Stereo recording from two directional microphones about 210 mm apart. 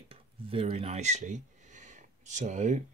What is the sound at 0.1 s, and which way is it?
Speech, 25° right (ahead or behind).